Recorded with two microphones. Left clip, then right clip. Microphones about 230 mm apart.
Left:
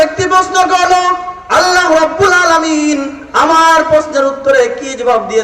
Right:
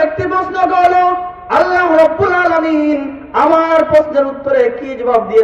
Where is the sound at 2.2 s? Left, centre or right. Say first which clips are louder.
Left 3 dB; centre.